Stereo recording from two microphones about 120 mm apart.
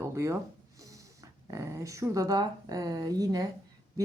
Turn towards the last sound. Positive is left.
turn(degrees=-30)  # may be behind; listen again after turning